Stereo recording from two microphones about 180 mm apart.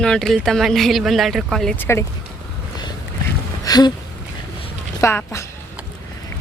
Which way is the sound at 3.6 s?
20° left (ahead or behind).